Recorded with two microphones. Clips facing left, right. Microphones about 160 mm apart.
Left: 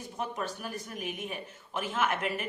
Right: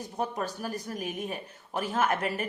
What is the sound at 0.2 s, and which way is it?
A man's voice, 40° right (ahead or behind).